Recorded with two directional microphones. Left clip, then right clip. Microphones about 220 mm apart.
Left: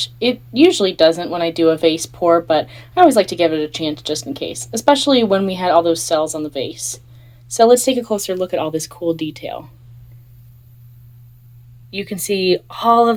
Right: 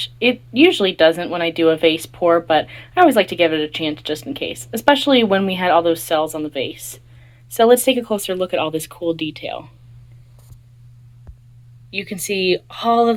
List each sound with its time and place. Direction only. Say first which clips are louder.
0.0 s speech: right 1 dB; 10° left (ahead or behind)
11.9 s speech: left 2 dB; 10° left (ahead or behind)